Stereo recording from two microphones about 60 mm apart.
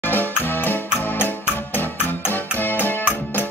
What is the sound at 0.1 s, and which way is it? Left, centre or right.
Music, left.